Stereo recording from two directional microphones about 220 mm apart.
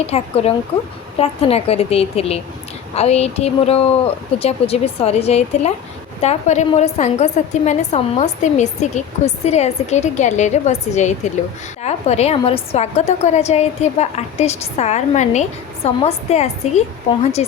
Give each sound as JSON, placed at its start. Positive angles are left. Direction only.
{"t": 0.1, "sound": "a woman's voice", "side_deg": 25}